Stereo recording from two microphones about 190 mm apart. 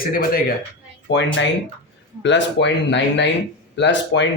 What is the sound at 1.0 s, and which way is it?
A man's voice, 65° left (ahead or behind).